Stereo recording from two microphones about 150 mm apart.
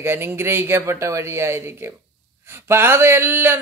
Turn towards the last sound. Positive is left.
turn(degrees=-15)  # may be behind; listen again after turning